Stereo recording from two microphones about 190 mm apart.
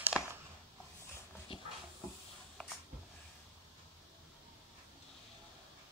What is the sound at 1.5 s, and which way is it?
Hiss, 30° left (ahead or behind).